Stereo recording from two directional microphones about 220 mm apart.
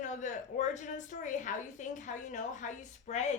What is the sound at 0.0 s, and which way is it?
A woman's voice, 35° left (ahead or behind).